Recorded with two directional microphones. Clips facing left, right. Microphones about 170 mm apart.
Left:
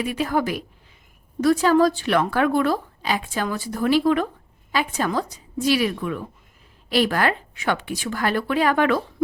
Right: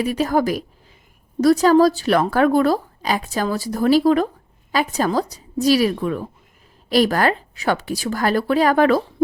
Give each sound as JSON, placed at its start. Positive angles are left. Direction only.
{"t": 0.0, "sound": "a woman's voice", "side_deg": -40}